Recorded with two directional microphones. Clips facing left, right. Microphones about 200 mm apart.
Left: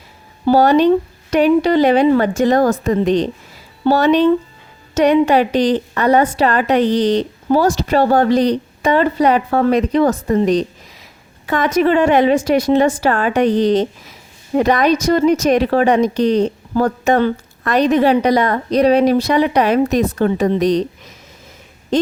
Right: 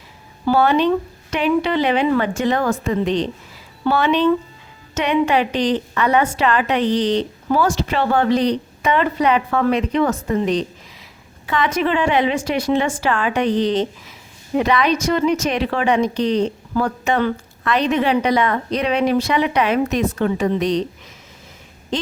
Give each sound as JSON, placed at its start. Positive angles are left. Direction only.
{"t": 0.4, "sound": "a woman's voice", "side_deg": 40}